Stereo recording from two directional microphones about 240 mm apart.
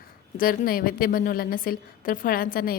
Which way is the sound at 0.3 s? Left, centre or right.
Left.